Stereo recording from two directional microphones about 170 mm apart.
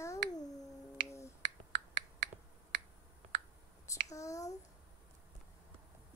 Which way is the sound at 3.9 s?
20° left (ahead or behind).